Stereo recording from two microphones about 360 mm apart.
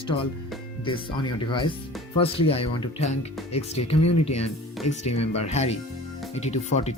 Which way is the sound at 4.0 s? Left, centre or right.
Left.